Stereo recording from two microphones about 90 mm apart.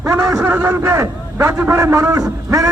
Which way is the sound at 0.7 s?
35° right (ahead or behind).